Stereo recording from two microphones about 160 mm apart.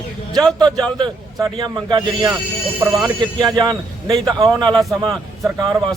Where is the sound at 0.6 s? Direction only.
25° right (ahead or behind).